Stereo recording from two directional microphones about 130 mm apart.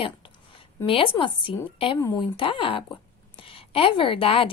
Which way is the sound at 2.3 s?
40° left (ahead or behind).